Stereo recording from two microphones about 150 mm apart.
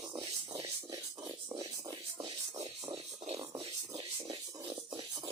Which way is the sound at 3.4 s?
25° right (ahead or behind).